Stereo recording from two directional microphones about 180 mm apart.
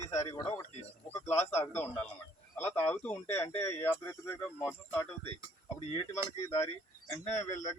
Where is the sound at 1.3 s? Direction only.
15° left (ahead or behind).